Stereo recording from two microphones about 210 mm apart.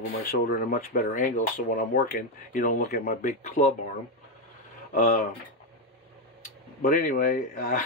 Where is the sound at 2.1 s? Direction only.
40° left (ahead or behind).